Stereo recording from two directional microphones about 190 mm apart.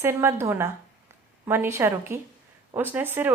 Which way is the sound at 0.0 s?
15° right (ahead or behind).